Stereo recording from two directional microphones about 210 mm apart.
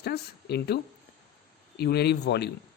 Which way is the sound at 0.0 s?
50° left (ahead or behind).